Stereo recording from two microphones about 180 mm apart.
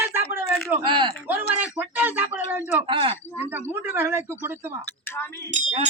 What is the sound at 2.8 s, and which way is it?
Speech, 30° right (ahead or behind).